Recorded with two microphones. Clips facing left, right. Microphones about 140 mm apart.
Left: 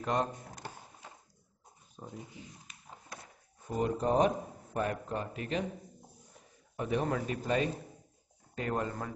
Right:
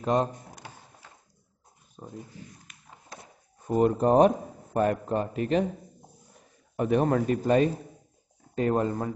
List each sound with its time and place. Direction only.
0.0 s speech: 25° right (ahead or behind)
2.0 s speech: 5° right (ahead or behind)
2.3 s speech: 20° left (ahead or behind)
3.6 s a man's voice: 55° right (ahead or behind)
5.1 s speech: 40° right (ahead or behind)
6.8 s a man's voice: 55° right (ahead or behind)
8.5 s speech: 30° right (ahead or behind)